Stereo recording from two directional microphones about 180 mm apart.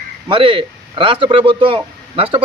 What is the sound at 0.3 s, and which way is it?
A man's voice, 30° right (ahead or behind).